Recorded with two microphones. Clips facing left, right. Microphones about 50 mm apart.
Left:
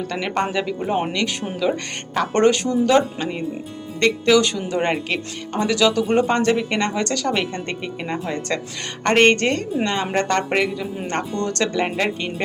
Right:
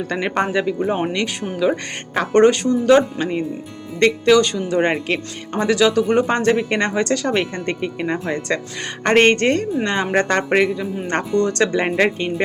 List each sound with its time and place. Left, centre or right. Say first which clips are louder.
0.1 s speech: right 3 dB; centre
4.3 s speech: right 1 dB; centre